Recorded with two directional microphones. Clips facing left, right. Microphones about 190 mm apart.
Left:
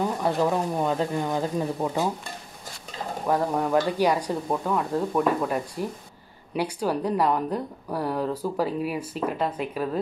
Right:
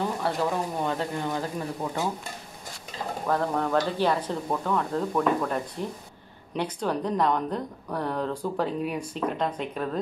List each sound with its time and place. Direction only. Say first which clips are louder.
0.2 s a woman's voice: left 3 dB; 15° left (ahead or behind)
3.3 s a woman's voice: left 2 dB; 10° left (ahead or behind)